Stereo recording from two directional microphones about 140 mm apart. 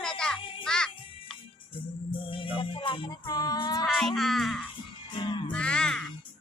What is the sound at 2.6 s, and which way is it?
Music, 35° left (ahead or behind).